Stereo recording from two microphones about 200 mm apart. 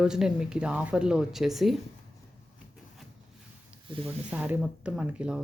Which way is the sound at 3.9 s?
25° right (ahead or behind).